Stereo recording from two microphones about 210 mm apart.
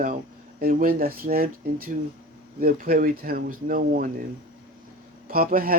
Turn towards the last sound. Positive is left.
turn(degrees=-45)  # may be behind; listen again after turning